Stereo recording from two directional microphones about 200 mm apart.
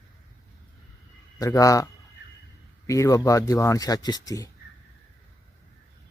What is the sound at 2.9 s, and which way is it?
Speech, 15° left (ahead or behind).